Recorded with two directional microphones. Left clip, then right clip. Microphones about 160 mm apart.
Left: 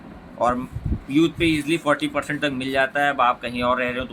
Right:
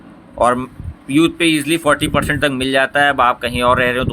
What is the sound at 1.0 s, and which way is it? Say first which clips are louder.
Speech: right 6 dB; 70° right (ahead or behind).